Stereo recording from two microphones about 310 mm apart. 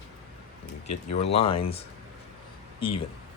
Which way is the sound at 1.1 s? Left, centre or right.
Centre.